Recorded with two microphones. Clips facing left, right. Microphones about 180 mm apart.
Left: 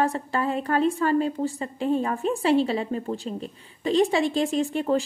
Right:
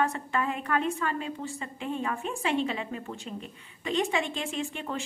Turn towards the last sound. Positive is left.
turn(degrees=35)  # may be behind; listen again after turning